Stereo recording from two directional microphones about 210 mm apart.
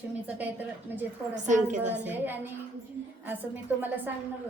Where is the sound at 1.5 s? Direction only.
35° right (ahead or behind).